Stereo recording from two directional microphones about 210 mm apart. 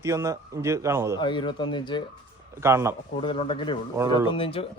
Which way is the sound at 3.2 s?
25° left (ahead or behind).